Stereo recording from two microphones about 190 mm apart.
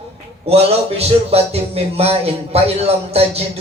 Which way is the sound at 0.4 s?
30° right (ahead or behind).